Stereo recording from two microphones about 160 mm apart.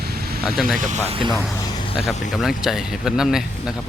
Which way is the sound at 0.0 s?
75° right (ahead or behind).